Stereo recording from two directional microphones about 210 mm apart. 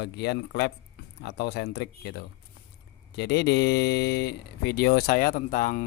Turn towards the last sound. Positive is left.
turn(degrees=40)  # may be behind; listen again after turning